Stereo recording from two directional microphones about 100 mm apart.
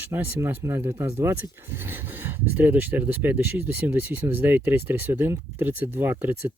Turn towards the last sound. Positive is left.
turn(degrees=-20)  # may be behind; listen again after turning